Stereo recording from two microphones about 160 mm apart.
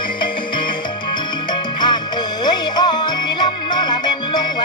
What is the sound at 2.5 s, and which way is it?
Music, 25° left (ahead or behind).